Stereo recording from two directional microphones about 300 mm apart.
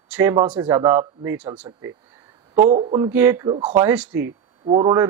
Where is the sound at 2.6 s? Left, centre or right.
Centre.